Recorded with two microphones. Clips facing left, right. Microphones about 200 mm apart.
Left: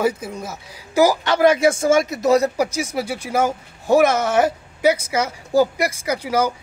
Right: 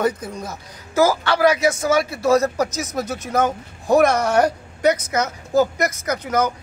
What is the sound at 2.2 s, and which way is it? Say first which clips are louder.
A woman's voice: right 1 dB; 15° left (ahead or behind).